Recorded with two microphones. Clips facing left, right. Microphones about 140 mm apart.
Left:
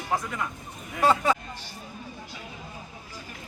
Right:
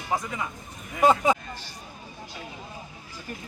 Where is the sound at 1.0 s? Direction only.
20° right (ahead or behind).